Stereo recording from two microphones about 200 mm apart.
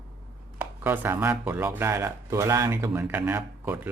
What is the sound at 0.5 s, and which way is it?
Speech, 10° right (ahead or behind).